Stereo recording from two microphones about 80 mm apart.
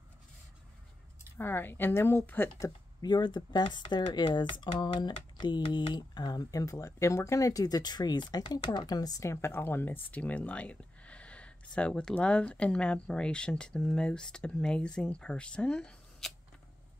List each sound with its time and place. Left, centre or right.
1.4 s speech: left
3.0 s speech: left
6.6 s speech: left; by 16.3 s centre